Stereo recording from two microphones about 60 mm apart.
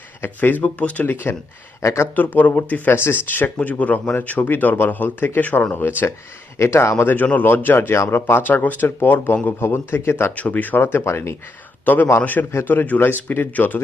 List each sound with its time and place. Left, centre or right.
0.2 s speech: left
0.6 s speech: left
1.0 s speech: left
1.8 s speech: left
2.1 s speech: left
3.6 s speech: left
6.6 s speech: left
7.0 s speech: left
9.6 s speech: left
10.3 s speech: left
12.1 s speech: left